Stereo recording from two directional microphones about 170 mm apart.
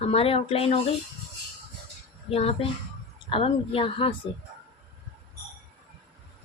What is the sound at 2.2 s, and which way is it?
Speech, 35° left (ahead or behind).